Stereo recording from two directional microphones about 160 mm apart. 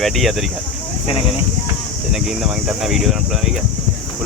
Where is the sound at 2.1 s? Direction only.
Centre (ahead or behind).